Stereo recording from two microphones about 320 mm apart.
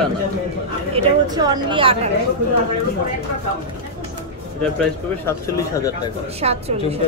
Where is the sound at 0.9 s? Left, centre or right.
Centre.